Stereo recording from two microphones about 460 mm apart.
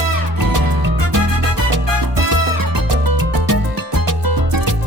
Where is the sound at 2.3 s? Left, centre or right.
Right.